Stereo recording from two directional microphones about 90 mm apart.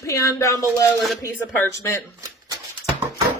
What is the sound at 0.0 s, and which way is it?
Speech, 30° left (ahead or behind).